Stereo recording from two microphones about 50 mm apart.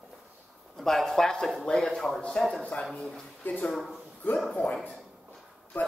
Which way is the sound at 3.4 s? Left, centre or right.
Left.